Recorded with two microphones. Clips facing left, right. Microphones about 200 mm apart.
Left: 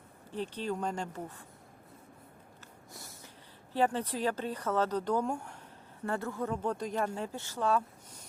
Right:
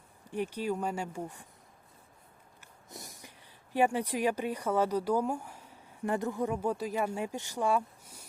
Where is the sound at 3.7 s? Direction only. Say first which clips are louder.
Right 2 dB; 10° right (ahead or behind).